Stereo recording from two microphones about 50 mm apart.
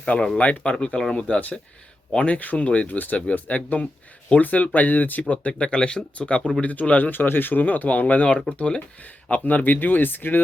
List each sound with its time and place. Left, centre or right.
0.0 s speech: left
9.3 s speech: left